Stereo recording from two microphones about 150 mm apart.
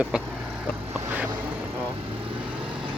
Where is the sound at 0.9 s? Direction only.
15° right (ahead or behind).